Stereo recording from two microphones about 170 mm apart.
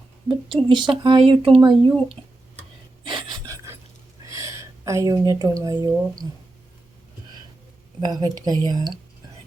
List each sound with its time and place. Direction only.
0.3 s speech: 25° right (ahead or behind)
2.6 s a sound: 30° right (ahead or behind)
4.3 s speech: 20° right (ahead or behind)
8.0 s speech: 25° right (ahead or behind)